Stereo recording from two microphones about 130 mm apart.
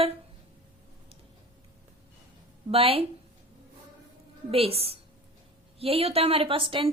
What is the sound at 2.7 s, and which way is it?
Speech, 50° right (ahead or behind).